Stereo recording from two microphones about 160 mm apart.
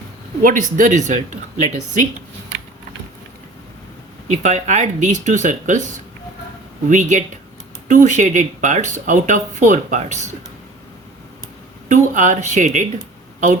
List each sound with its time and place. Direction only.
0.4 s speech: 55° right (ahead or behind)
4.4 s speech: 50° right (ahead or behind)
6.8 s speech: 50° right (ahead or behind)
11.9 s speech: 50° right (ahead or behind)